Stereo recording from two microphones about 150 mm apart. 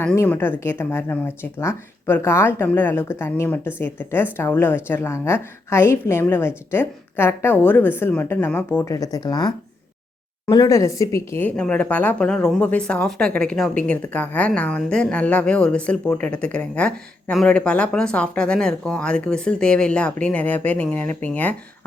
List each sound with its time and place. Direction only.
0.0 s a woman's voice: 10° left (ahead or behind); by 9.5 s 30° left (ahead or behind)
10.5 s a woman's voice: 25° left (ahead or behind)